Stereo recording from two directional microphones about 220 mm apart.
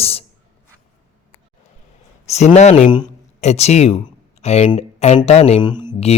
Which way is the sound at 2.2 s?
30° left (ahead or behind).